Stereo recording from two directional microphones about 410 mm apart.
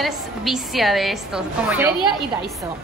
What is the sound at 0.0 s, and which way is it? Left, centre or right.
A woman's voice, centre.